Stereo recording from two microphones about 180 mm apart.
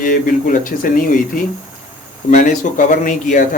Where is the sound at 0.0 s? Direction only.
50° left (ahead or behind).